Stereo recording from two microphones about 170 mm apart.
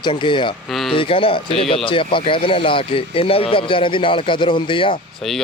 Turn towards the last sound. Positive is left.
turn(degrees=0)  # may be behind; listen again after turning